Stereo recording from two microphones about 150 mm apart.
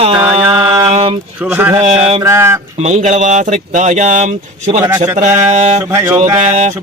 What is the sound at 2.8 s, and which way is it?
Speech, 50° right (ahead or behind).